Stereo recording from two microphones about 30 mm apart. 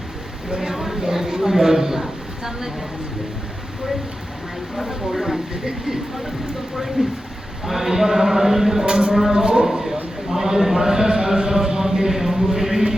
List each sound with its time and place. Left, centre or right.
0.7 s speech: centre
4.8 s a man's voice: centre
6.7 s a man's voice: centre
8.9 s speech: right
9.6 s a man's voice: centre